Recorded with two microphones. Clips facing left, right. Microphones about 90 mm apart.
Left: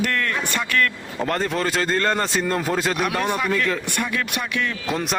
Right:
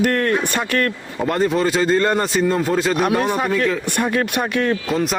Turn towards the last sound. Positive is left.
turn(degrees=0)  # may be behind; listen again after turning